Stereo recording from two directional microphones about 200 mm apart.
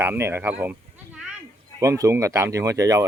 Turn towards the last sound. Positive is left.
turn(degrees=-15)  # may be behind; listen again after turning